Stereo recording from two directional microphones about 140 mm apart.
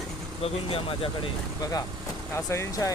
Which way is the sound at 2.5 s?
20° left (ahead or behind).